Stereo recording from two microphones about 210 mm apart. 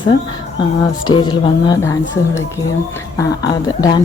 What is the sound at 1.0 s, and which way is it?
Speech, 20° left (ahead or behind).